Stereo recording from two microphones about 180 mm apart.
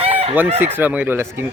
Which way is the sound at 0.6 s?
10° right (ahead or behind).